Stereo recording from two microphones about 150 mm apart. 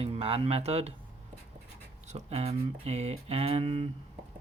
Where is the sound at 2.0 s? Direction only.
45° right (ahead or behind).